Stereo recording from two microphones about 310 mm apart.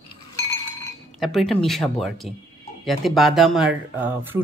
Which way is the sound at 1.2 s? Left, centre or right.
Centre.